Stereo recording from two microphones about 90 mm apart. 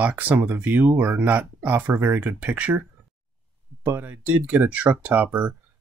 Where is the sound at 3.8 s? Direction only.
20° right (ahead or behind).